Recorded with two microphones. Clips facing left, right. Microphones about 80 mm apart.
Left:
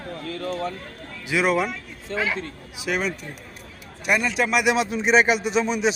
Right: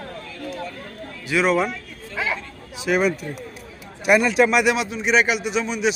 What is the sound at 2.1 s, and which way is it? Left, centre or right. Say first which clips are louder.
Speech: left 1 dB; centre.